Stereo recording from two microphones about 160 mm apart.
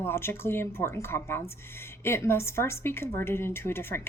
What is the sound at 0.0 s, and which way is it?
A woman's voice, 15° left (ahead or behind).